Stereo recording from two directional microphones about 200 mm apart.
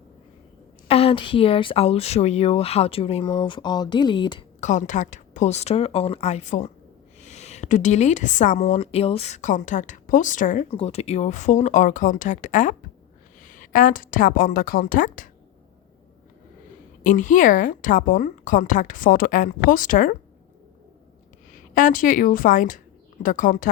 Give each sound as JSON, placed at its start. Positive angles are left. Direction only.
{"t": 0.9, "sound": "speech", "side_deg": 30}
{"t": 4.6, "sound": "a woman's voice", "side_deg": 35}
{"t": 17.0, "sound": "a woman's voice", "side_deg": 40}
{"t": 21.5, "sound": "a woman's voice", "side_deg": 40}